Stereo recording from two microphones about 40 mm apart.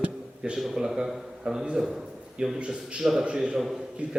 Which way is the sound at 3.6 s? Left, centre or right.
Centre.